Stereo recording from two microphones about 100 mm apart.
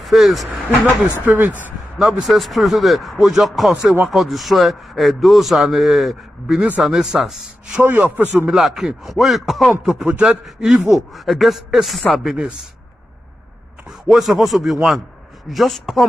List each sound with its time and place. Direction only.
0.0 s speech: centre (ahead or behind)
1.2 s a man's voice: 20° right (ahead or behind)
2.0 s a man's voice: centre (ahead or behind)
7.8 s a man's voice: 15° right (ahead or behind)
8.5 s a man's voice: 5° right (ahead or behind)
13.8 s a man's voice: centre (ahead or behind)